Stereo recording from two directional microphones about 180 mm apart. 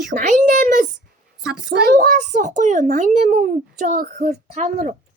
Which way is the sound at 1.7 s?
65° right (ahead or behind).